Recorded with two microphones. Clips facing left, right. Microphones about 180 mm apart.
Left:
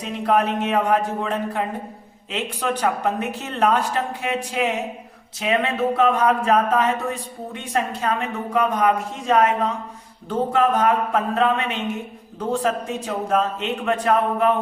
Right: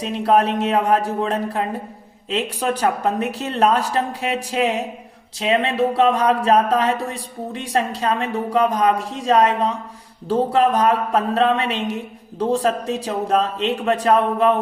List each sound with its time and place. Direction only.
0.0 s speech: 35° right (ahead or behind)